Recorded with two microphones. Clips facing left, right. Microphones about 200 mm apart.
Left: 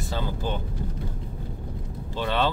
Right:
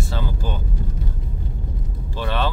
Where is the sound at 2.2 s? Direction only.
15° left (ahead or behind).